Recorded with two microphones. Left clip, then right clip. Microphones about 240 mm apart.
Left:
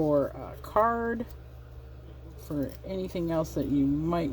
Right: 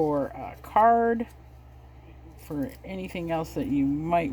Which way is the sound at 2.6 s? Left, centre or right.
Right.